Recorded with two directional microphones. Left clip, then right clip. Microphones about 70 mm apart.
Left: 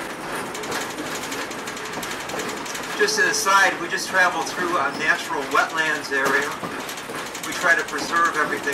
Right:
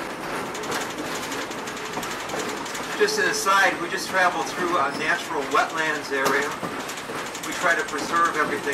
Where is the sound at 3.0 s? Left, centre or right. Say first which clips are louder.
Left 2 dB; left.